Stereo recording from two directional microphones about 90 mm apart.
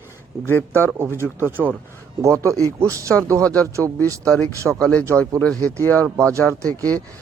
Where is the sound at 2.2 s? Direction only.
35° right (ahead or behind).